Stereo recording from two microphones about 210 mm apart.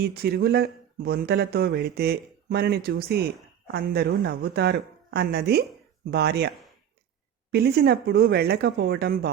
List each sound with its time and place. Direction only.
0.0 s speech: 50° right (ahead or behind)
7.5 s speech: 50° right (ahead or behind)